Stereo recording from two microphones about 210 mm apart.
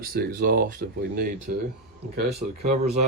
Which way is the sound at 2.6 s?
30° right (ahead or behind).